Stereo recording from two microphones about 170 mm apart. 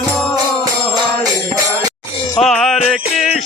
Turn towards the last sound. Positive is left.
turn(degrees=0)  # may be behind; listen again after turning